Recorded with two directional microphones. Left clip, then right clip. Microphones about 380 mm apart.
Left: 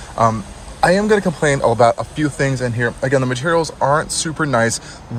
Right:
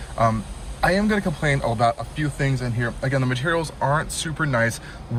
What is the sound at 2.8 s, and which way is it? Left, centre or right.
Speech, centre.